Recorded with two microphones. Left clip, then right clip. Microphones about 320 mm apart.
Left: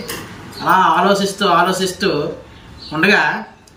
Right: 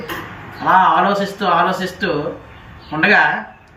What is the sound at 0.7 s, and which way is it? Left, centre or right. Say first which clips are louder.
Speech: even; centre.